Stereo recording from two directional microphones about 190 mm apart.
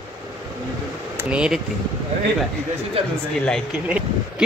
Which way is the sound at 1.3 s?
5° right (ahead or behind).